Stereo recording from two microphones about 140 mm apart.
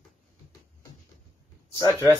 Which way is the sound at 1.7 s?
25° left (ahead or behind).